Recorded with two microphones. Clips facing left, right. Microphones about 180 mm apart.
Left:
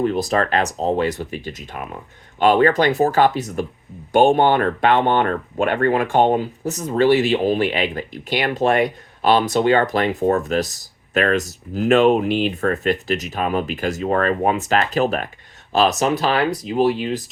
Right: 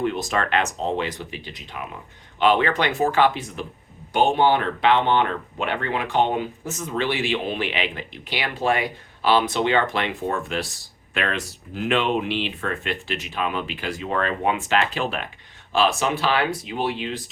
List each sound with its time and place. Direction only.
0.0 s speech: 40° left (ahead or behind)